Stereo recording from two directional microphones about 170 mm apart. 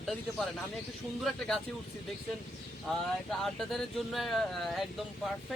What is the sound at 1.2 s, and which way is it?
Speech, centre (ahead or behind).